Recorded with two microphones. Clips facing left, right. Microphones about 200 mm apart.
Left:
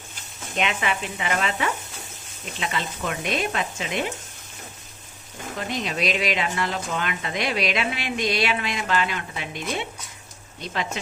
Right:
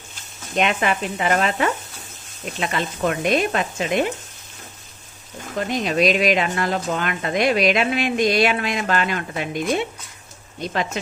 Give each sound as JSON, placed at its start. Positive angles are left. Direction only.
{"t": 0.6, "sound": "speech", "side_deg": -45}
{"t": 5.5, "sound": "speech", "side_deg": -50}